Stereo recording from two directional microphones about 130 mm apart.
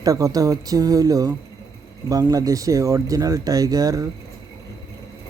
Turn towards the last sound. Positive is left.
turn(degrees=-25)  # may be behind; listen again after turning